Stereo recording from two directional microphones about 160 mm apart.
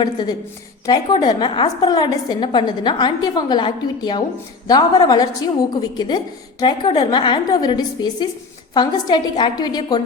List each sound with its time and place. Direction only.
0.0 s a woman's voice: 25° left (ahead or behind)